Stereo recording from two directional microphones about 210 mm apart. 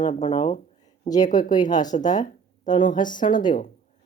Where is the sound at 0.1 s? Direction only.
25° left (ahead or behind).